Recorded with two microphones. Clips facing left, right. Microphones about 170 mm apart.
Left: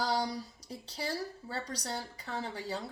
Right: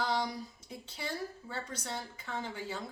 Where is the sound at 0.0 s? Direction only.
35° left (ahead or behind).